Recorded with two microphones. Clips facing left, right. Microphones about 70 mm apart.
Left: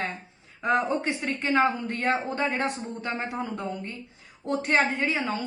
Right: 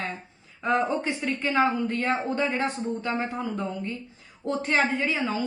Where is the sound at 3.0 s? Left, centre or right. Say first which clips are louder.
Left 1 dB; left.